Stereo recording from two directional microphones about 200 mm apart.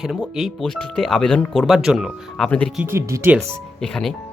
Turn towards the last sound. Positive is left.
turn(degrees=0)  # may be behind; listen again after turning